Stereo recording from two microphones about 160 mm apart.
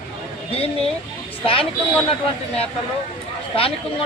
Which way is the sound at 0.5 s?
40° left (ahead or behind).